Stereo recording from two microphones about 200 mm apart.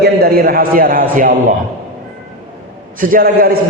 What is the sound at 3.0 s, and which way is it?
Speech, 45° right (ahead or behind).